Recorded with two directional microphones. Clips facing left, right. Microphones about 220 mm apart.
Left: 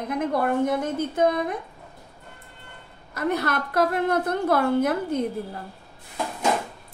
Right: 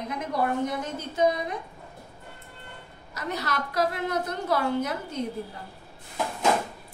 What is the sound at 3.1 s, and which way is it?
A woman's voice, 55° left (ahead or behind).